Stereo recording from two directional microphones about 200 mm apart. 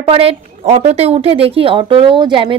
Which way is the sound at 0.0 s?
30° right (ahead or behind).